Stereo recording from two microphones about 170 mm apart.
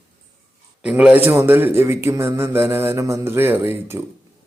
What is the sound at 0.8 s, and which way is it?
A man's voice, 5° right (ahead or behind).